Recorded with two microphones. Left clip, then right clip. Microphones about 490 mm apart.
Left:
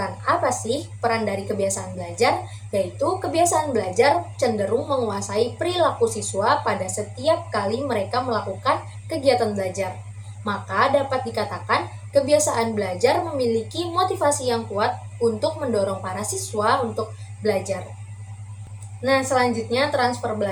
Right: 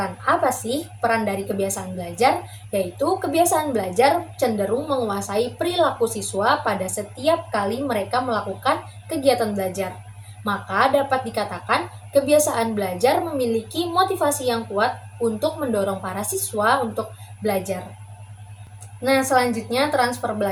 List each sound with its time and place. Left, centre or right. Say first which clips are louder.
0.3 s a woman's voice: right 1 dB; right
19.0 s a woman's voice: right 1 dB; right